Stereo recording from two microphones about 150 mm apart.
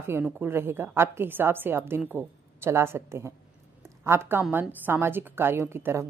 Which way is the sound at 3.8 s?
15° right (ahead or behind).